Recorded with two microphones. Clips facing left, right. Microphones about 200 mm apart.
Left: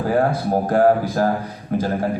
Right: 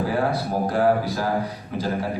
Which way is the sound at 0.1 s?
45° left (ahead or behind).